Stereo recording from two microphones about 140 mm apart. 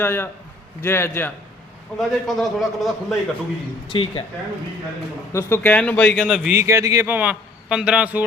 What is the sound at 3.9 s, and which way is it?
Speech, 35° left (ahead or behind).